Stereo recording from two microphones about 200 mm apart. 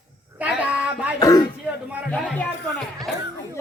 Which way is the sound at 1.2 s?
20° left (ahead or behind).